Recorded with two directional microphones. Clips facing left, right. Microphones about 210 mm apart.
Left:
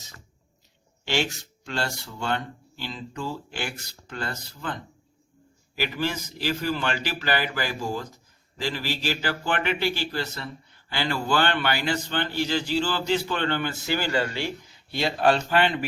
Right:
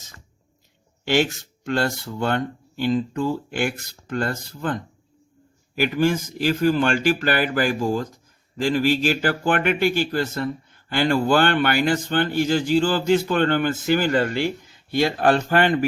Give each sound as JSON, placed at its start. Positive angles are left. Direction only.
{"t": 1.0, "sound": "speech", "side_deg": -50}
{"t": 5.8, "sound": "speech", "side_deg": -50}